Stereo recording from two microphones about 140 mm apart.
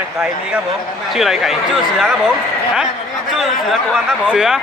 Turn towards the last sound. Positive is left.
turn(degrees=-5)  # may be behind; listen again after turning